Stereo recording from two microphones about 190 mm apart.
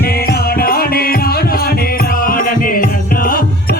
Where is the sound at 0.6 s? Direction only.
50° left (ahead or behind).